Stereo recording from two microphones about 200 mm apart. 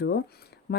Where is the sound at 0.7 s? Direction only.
55° left (ahead or behind).